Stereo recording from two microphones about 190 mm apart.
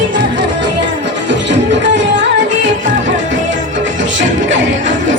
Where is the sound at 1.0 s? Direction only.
70° right (ahead or behind).